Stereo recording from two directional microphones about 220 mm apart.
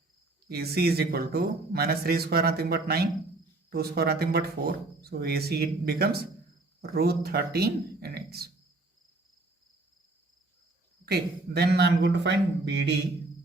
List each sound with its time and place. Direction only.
0.4 s speech: 45° right (ahead or behind)
11.0 s speech: 45° right (ahead or behind)